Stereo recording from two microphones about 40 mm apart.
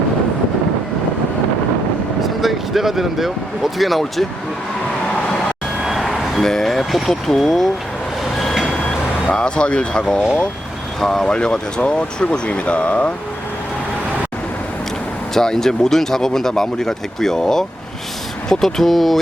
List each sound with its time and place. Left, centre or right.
2.2 s speech: centre
5.8 s speech: centre
9.3 s speech: left
11.0 s speech: centre; by 13.1 s left
15.4 s speech: centre